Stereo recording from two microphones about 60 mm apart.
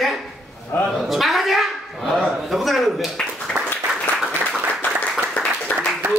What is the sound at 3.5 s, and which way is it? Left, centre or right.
Applause, centre.